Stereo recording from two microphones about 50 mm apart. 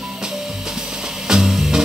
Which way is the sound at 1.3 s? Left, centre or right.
Centre.